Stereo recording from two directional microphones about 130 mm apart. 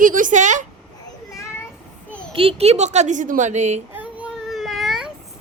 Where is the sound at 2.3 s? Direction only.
50° right (ahead or behind); by 3.8 s 65° right (ahead or behind).